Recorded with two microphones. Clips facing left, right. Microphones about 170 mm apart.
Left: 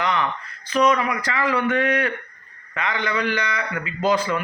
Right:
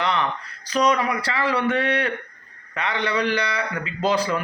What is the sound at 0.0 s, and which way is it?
Speech, 30° right (ahead or behind).